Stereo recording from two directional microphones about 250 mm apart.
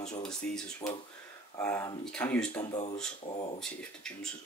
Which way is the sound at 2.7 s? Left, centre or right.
Left.